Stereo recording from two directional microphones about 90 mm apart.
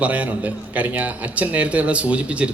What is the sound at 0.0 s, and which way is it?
A man's voice, 15° right (ahead or behind).